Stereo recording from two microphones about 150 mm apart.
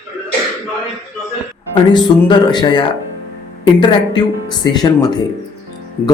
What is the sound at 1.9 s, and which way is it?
Speech, 30° left (ahead or behind).